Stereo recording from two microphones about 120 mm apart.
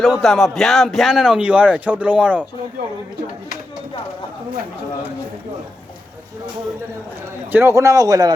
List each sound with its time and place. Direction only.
0.0 s speech: centre (ahead or behind)
7.5 s speech: 25° right (ahead or behind)